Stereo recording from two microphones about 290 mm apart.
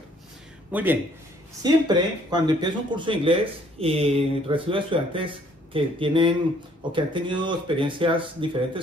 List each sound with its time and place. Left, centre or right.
0.7 s speech: centre